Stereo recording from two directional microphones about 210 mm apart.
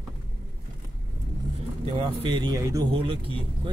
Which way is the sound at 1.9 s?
25° right (ahead or behind).